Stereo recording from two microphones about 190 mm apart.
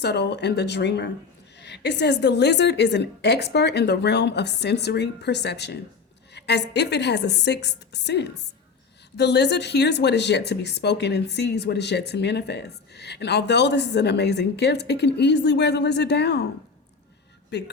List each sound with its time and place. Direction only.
0.0 s speech: 60° left (ahead or behind)
17.5 s speech: 65° left (ahead or behind)